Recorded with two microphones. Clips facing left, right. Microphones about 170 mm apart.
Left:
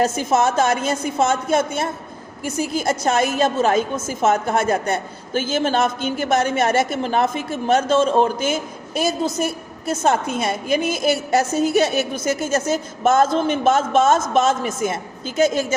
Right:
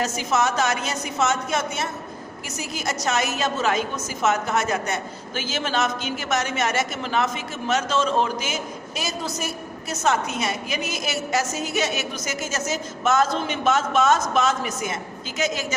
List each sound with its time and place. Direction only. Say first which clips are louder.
0.0 s a woman's voice: left 5 dB; 50° left (ahead or behind)